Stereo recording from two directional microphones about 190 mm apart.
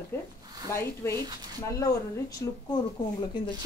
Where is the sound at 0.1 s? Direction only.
10° left (ahead or behind).